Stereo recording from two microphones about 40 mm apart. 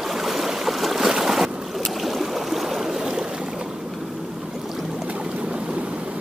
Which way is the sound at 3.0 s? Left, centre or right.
Centre.